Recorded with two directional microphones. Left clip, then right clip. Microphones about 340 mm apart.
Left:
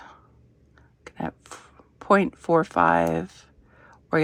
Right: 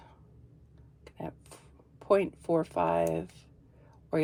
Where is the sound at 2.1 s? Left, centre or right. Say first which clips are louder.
Left 6 dB; left.